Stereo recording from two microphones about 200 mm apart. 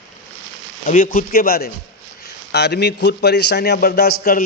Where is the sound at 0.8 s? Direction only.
45° left (ahead or behind).